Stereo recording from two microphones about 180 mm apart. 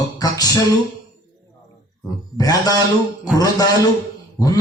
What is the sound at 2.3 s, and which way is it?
A man's voice, 20° left (ahead or behind).